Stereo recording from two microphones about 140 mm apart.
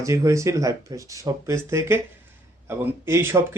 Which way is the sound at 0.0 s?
20° right (ahead or behind).